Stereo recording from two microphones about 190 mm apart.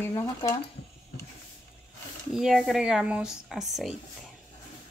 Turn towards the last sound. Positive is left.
turn(degrees=0)  # may be behind; listen again after turning